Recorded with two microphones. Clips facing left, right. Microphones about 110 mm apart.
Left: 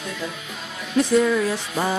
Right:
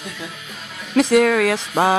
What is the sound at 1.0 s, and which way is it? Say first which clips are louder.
Speech: right 4 dB; 90° right.